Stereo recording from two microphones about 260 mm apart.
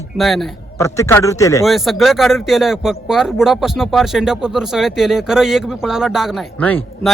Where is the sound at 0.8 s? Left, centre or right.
Centre.